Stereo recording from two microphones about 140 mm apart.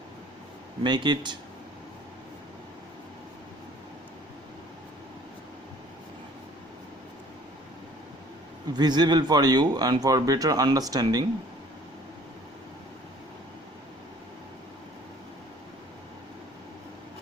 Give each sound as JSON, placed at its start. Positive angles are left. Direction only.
{"t": 0.8, "sound": "speech", "side_deg": -35}
{"t": 8.7, "sound": "speech", "side_deg": -30}